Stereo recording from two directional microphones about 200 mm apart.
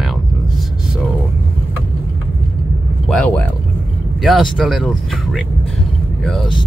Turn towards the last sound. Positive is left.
turn(degrees=0)  # may be behind; listen again after turning